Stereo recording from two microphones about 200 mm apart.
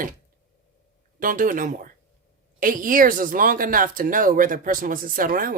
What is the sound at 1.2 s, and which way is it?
Speech, 45° right (ahead or behind).